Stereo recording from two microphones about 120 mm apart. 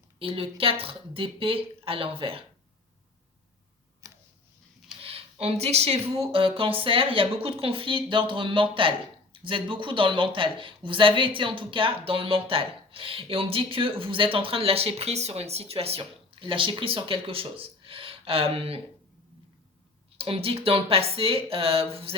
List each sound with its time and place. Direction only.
0.2 s speech: 50° right (ahead or behind)
4.0 s tick-tock: 25° right (ahead or behind)
4.9 s speech: 50° right (ahead or behind)
20.1 s speech: 55° right (ahead or behind)